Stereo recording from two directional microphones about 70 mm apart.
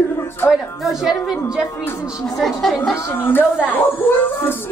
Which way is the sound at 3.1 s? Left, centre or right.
Left.